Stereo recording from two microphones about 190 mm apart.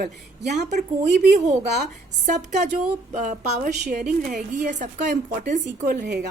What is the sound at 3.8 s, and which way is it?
A woman's voice, 55° right (ahead or behind).